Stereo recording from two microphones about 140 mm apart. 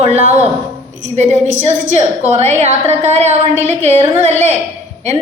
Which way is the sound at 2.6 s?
55° right (ahead or behind).